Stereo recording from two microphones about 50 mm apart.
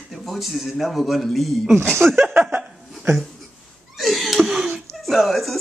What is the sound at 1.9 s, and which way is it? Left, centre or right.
Speech, right.